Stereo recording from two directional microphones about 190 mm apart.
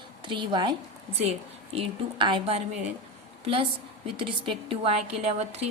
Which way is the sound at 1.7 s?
25° right (ahead or behind).